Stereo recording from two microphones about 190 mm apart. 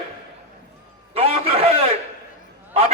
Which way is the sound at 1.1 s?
30° right (ahead or behind).